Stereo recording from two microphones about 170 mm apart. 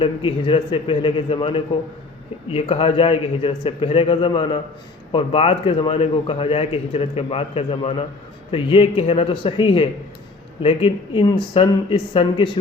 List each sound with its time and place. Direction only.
0.0 s a man's voice: 30° left (ahead or behind)